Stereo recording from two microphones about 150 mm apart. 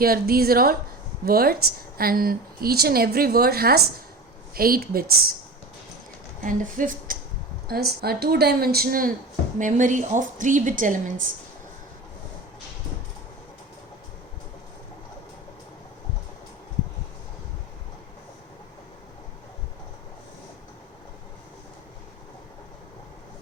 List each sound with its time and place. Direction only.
0.0 s a woman's voice: 85° right
4.5 s speech: 75° right (ahead or behind)
6.4 s speech: 65° right (ahead or behind)
7.7 s speech: 90° right; by 9.1 s 75° right (ahead or behind)
9.6 s a woman's voice: 60° right (ahead or behind)